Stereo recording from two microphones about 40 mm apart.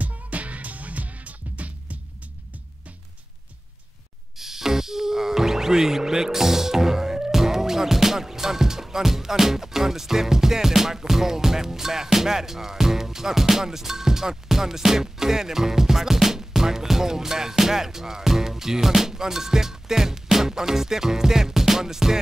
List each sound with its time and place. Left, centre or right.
0.0 s music: right
4.4 s speech: centre